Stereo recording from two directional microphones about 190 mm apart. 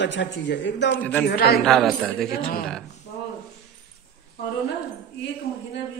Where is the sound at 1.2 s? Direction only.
55° left (ahead or behind).